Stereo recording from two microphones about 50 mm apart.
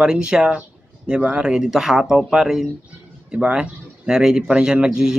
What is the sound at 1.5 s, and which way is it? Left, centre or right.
Speech, centre.